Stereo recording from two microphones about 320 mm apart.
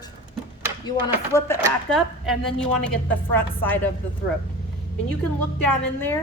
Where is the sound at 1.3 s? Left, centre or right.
Centre.